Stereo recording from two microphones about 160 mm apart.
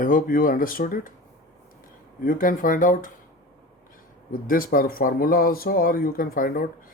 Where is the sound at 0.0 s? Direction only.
60° left (ahead or behind).